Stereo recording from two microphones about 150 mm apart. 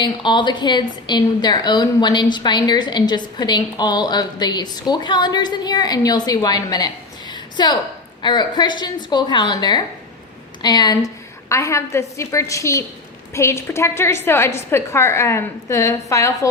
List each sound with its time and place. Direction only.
0.0 s a woman's voice: 30° left (ahead or behind)